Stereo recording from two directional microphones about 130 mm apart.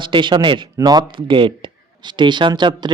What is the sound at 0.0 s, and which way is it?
Speech, 40° right (ahead or behind).